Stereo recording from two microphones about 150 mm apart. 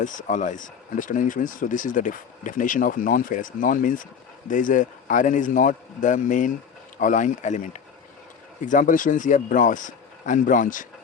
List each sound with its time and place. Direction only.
0.0 s speech: 60° left (ahead or behind)